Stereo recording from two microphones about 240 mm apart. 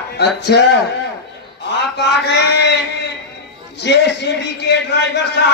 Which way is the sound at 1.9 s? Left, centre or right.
Left.